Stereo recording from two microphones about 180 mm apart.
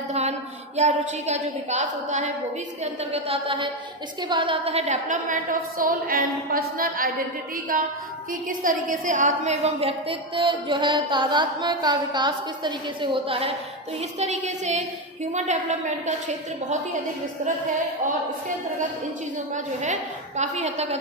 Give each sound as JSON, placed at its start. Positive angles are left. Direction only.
{"t": 0.1, "sound": "a woman's voice", "side_deg": -40}
{"t": 8.3, "sound": "a woman's voice", "side_deg": -50}
{"t": 14.2, "sound": "a woman's voice", "side_deg": -40}
{"t": 19.5, "sound": "a woman's voice", "side_deg": -45}